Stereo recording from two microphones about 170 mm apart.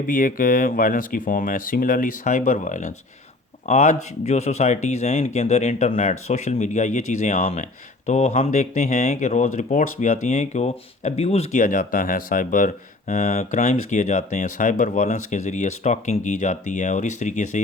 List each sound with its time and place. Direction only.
0.1 s speech: 55° left (ahead or behind)
5.9 s speech: 50° left (ahead or behind)
11.6 s speech: 55° left (ahead or behind)